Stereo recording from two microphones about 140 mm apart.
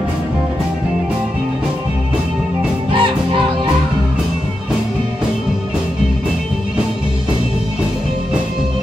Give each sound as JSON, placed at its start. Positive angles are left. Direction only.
{"t": 2.9, "sound": "music", "side_deg": -35}